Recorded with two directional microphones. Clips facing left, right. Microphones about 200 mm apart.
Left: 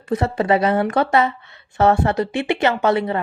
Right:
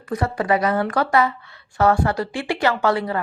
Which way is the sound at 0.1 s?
25° left (ahead or behind).